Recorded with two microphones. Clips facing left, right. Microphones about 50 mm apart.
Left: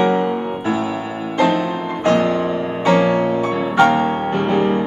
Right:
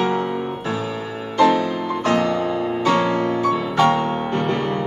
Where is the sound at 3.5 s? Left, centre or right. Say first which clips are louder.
Left 3 dB; centre.